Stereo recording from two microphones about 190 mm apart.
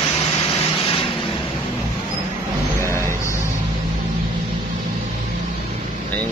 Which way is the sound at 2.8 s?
15° left (ahead or behind).